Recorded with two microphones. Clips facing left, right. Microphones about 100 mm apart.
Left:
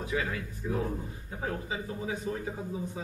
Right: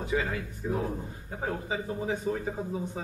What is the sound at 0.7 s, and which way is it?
Speech, 15° right (ahead or behind).